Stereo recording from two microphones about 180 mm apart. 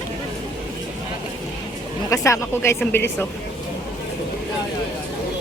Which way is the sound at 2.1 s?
15° left (ahead or behind).